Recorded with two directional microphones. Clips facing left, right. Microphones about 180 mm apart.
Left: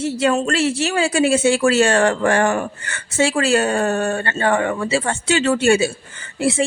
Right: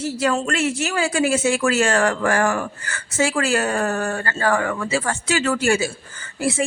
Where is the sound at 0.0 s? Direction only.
25° left (ahead or behind).